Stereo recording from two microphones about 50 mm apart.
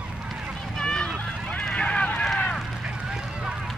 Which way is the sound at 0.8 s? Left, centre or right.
Centre.